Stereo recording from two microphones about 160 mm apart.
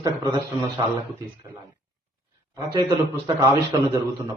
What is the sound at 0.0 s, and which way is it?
Speech, 25° right (ahead or behind).